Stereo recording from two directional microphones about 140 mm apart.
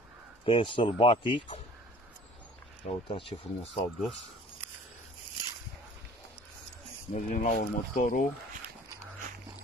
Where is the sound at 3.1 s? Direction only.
40° left (ahead or behind).